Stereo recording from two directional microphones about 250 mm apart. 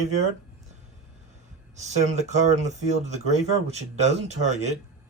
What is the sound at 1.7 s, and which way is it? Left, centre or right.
Speech, right.